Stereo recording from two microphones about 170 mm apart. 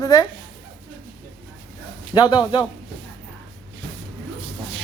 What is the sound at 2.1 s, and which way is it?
Speech, 25° left (ahead or behind).